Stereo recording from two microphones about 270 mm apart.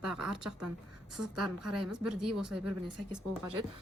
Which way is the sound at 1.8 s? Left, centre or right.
Centre.